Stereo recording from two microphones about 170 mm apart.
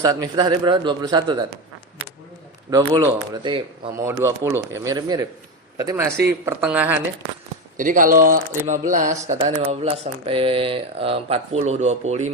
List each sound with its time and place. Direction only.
0.0 s speech: 20° right (ahead or behind)
2.6 s speech: 20° right (ahead or behind)
7.8 s speech: 50° right (ahead or behind)
9.5 s speech: 30° right (ahead or behind)